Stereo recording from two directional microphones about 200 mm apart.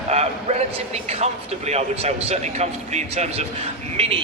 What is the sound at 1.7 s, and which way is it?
A man's voice, 35° right (ahead or behind).